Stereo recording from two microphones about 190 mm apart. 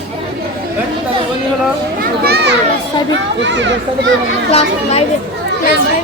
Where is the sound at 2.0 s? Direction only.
55° right (ahead or behind).